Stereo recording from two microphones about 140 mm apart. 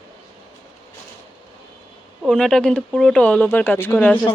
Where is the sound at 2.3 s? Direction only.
5° left (ahead or behind).